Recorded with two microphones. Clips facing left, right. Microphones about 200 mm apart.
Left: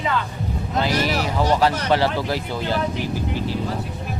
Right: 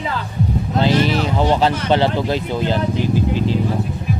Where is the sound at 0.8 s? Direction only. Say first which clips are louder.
Right 5 dB; 25° right (ahead or behind).